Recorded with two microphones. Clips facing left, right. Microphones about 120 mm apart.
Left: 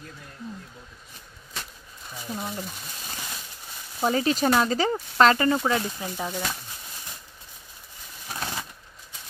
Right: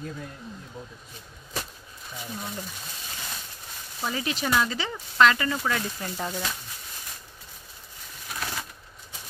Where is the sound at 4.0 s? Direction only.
40° left (ahead or behind).